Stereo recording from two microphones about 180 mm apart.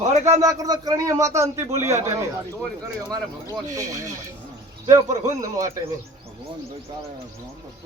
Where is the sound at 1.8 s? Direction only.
40° right (ahead or behind).